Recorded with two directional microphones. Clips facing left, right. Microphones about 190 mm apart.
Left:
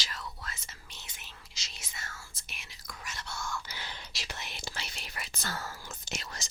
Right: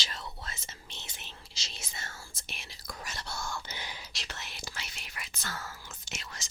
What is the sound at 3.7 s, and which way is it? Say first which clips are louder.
Whispering: right 1 dB; 15° right (ahead or behind).